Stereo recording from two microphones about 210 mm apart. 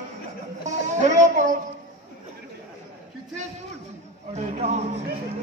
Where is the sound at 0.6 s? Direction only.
35° right (ahead or behind).